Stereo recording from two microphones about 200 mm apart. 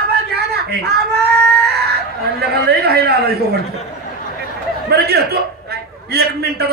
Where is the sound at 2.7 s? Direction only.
55° right (ahead or behind).